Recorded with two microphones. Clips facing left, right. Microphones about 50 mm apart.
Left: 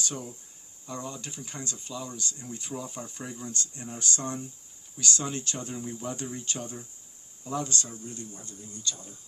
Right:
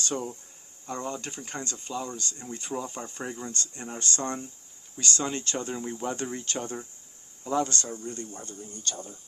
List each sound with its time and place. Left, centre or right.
0.0 s speech: right